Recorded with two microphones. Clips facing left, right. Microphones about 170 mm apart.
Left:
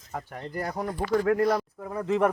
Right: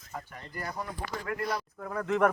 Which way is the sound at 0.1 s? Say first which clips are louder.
Left 7 dB; 60° left (ahead or behind).